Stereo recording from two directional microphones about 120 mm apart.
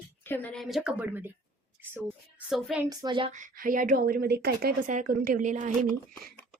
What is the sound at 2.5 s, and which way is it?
Speech, 5° right (ahead or behind).